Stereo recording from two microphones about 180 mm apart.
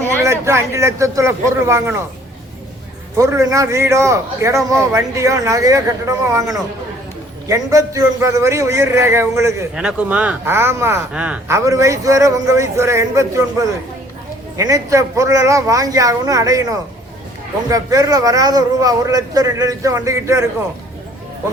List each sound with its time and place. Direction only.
0.2 s speech: 15° right (ahead or behind)
3.2 s a man's voice: 15° right (ahead or behind)